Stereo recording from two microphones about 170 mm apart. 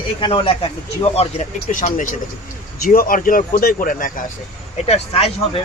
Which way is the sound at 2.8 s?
60° left (ahead or behind).